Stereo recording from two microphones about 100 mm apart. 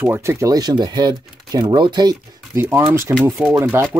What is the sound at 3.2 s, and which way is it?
Speech, 25° right (ahead or behind).